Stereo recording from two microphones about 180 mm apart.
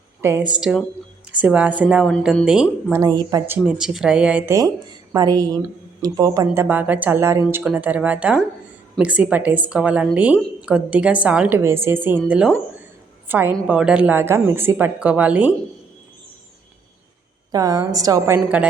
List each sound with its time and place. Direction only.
0.2 s a woman's voice: 15° right (ahead or behind)
0.6 s a woman's voice: centre (ahead or behind)
2.0 s speech: 5° left (ahead or behind)
3.2 s a woman's voice: 15° right (ahead or behind)
3.6 s speech: 5° right (ahead or behind)
5.1 s a woman's voice: 20° right (ahead or behind)
17.5 s a woman's voice: 20° right (ahead or behind)
18.4 s speech: 5° right (ahead or behind)